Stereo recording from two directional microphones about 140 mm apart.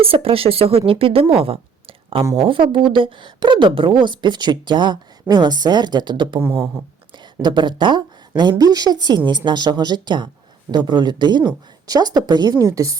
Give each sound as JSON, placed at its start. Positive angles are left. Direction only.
{"t": 0.0, "sound": "speech", "side_deg": -40}
{"t": 7.4, "sound": "speech", "side_deg": -35}